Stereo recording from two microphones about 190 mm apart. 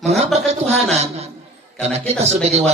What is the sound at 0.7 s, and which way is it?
A man's voice, 35° right (ahead or behind).